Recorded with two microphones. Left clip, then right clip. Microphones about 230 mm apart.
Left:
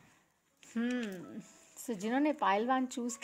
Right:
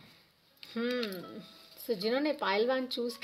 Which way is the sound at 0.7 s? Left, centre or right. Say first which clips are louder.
Right 4 dB; left.